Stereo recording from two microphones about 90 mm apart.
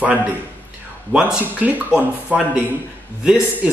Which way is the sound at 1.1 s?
15° right (ahead or behind).